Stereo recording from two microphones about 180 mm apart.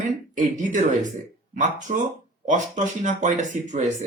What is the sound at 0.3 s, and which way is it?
Speech, 45° right (ahead or behind).